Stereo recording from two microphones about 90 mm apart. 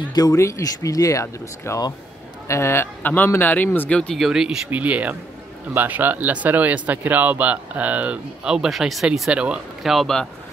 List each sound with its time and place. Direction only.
0.1 s speech: 45° left (ahead or behind)
0.4 s speech: 35° left (ahead or behind); by 4.2 s 15° left (ahead or behind)
4.2 s speech: 5° right (ahead or behind)
4.6 s speech: 15° right (ahead or behind)
9.8 s speech: centre (ahead or behind)